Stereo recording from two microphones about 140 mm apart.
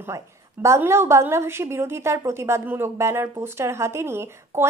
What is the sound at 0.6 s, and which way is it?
A woman's voice, 20° right (ahead or behind).